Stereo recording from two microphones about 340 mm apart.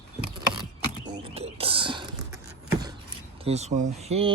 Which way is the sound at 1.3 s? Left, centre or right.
Centre.